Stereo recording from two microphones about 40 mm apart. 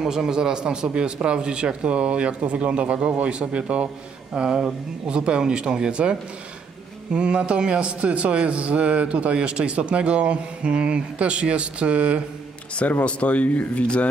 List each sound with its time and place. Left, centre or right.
0.0 s a man's voice: centre; by 12.2 s right
13.0 s speech: left